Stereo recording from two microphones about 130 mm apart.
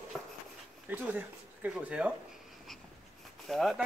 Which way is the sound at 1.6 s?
10° right (ahead or behind).